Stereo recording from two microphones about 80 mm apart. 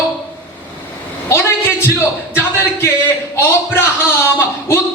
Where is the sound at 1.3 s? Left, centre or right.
Left.